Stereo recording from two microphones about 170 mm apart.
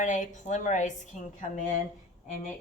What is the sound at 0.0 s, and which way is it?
A woman's voice, 45° left (ahead or behind).